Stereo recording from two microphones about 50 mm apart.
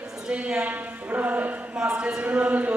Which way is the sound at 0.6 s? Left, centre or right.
Right.